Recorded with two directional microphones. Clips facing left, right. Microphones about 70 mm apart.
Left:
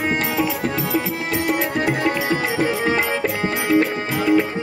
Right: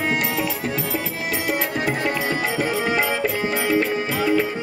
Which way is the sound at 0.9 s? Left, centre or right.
Left.